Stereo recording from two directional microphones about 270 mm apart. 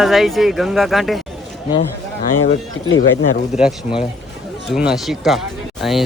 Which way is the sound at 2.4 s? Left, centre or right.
Left.